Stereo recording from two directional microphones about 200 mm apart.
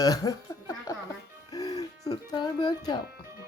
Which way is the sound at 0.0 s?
20° left (ahead or behind).